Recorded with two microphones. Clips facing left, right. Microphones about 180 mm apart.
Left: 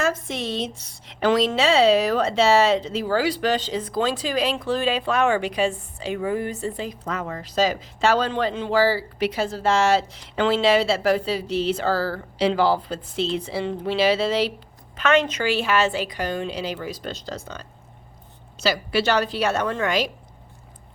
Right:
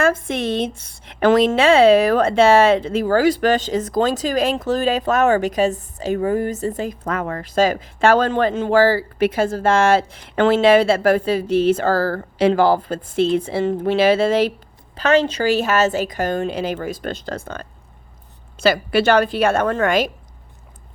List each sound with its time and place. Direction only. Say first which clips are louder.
0.0 s a woman's voice: right 6 dB; 55° right (ahead or behind)
14.9 s a woman's voice: right 4 dB; 35° right (ahead or behind); by 20.1 s 50° right (ahead or behind)